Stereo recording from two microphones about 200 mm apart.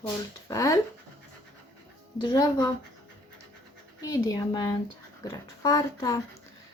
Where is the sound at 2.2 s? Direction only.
20° left (ahead or behind).